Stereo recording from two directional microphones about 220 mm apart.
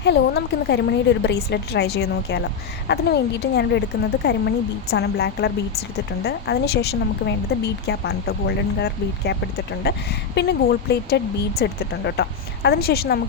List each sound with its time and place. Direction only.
0.0 s speech: 50° left (ahead or behind)